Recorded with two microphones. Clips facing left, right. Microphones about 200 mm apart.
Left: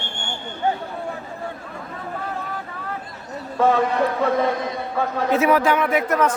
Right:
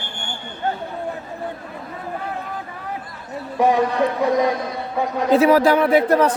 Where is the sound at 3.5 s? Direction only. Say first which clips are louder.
Right 1 dB; 15° right (ahead or behind).